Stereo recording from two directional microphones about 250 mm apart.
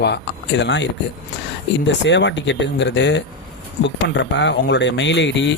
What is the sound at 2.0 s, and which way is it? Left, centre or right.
Speech, left.